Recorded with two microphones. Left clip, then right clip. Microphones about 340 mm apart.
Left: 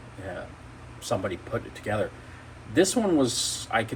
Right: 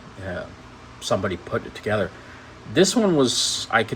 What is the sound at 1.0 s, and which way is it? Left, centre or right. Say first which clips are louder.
Speech: right 5 dB; right.